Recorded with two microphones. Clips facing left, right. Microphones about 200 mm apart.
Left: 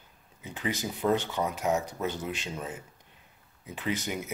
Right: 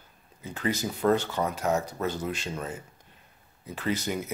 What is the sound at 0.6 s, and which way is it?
Speech, 15° left (ahead or behind).